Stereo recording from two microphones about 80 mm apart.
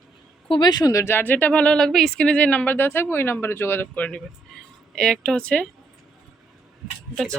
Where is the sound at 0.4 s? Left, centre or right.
Left.